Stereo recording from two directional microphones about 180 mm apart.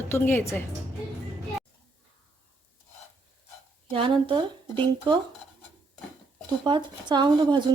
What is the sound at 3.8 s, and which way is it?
Speech, 30° right (ahead or behind).